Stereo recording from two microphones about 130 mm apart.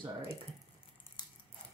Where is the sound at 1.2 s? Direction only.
35° left (ahead or behind).